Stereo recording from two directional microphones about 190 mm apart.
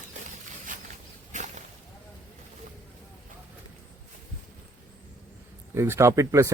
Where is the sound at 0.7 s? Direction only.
45° right (ahead or behind).